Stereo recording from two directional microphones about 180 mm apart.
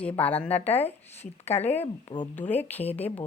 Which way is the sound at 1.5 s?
15° left (ahead or behind).